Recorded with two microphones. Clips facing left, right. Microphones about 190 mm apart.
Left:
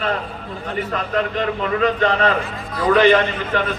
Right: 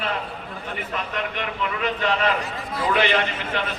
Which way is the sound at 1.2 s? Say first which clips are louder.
Left 9 dB; 35° left (ahead or behind).